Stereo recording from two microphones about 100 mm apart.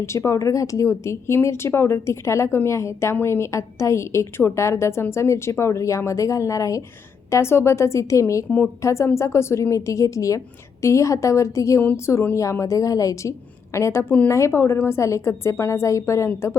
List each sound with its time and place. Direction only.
0.0 s speech: 25° left (ahead or behind)
8.4 s a woman's voice: 20° left (ahead or behind)
8.8 s a woman's voice: 30° left (ahead or behind)